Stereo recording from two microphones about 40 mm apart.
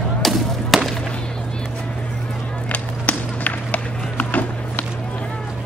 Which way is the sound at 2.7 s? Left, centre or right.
Left.